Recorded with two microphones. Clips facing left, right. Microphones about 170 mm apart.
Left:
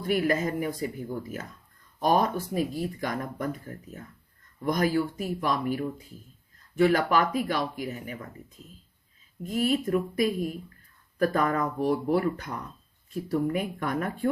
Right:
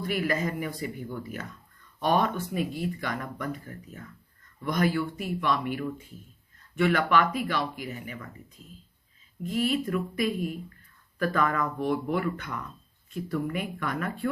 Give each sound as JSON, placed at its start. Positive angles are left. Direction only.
{"t": 0.1, "sound": "speech", "side_deg": 45}